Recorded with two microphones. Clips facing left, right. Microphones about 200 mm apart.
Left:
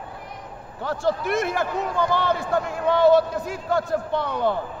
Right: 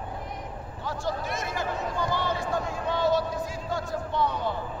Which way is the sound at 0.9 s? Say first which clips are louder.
Left 8 dB; 60° left (ahead or behind).